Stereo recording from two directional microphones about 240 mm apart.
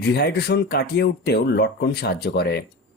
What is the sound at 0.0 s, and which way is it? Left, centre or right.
Speech, left.